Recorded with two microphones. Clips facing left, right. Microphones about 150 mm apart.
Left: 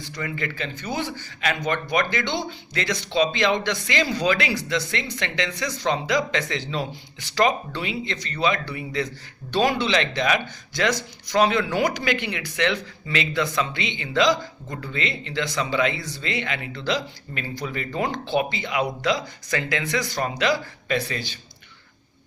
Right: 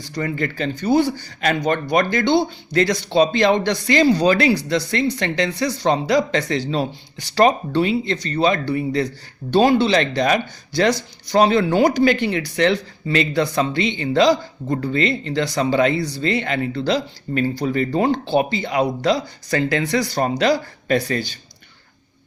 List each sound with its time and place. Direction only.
0.0 s speech: 40° right (ahead or behind)